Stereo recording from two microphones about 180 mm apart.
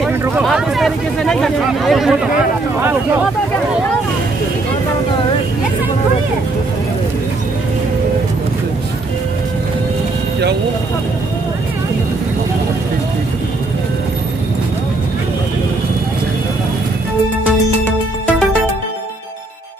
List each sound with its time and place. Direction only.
0.5 s speech: centre (ahead or behind)